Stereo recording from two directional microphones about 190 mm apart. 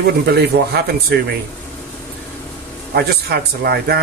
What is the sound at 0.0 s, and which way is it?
Speech, 60° right (ahead or behind).